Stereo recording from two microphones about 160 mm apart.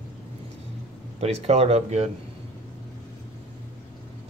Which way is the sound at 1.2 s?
40° right (ahead or behind).